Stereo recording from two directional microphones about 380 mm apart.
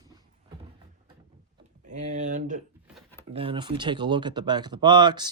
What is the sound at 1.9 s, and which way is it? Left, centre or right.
Speech, centre.